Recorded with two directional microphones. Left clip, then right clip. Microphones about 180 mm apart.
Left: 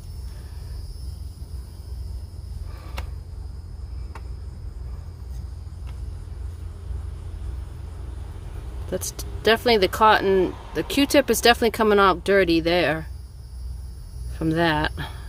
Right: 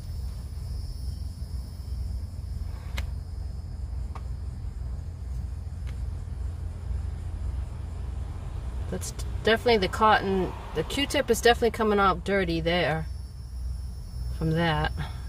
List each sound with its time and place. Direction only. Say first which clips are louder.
8.9 s speech: left 8 dB; 40° left (ahead or behind)
14.3 s speech: left 6 dB; 40° left (ahead or behind)